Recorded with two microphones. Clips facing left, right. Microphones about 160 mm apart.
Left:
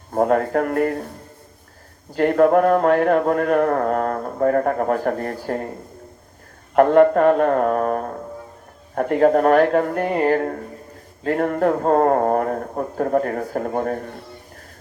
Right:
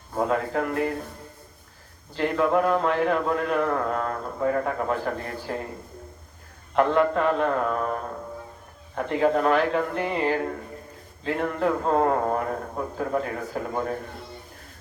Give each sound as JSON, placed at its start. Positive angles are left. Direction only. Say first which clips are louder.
{"t": 0.1, "sound": "a man's voice", "louder": "left 7 dB", "side_deg": 50}
{"t": 2.1, "sound": "a man's voice", "louder": "left 7 dB", "side_deg": 50}
{"t": 6.7, "sound": "a man's voice", "louder": "left 8 dB", "side_deg": 50}